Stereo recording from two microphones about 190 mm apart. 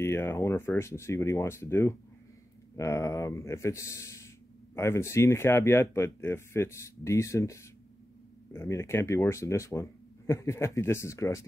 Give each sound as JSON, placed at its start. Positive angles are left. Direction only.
{"t": 0.0, "sound": "speech", "side_deg": 15}